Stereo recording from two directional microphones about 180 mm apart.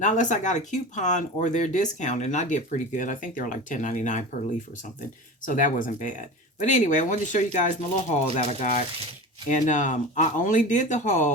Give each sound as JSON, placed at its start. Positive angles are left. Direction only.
{"t": 0.0, "sound": "speech", "side_deg": 45}
{"t": 5.5, "sound": "speech", "side_deg": 45}